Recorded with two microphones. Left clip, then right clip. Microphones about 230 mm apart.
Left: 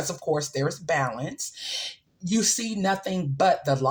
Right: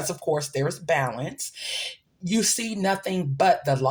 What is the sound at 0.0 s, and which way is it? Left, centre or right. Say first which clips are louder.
Speech: right 1 dB; right.